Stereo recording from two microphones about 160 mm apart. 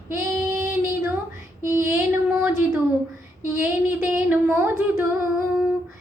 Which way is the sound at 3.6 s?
15° right (ahead or behind).